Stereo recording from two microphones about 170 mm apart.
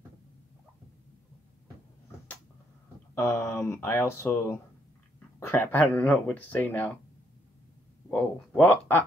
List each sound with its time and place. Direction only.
3.2 s speech: 20° left (ahead or behind)
8.1 s speech: 10° left (ahead or behind)